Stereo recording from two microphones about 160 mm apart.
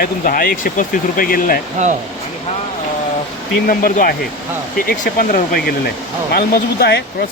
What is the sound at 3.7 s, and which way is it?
Speech, 60° left (ahead or behind).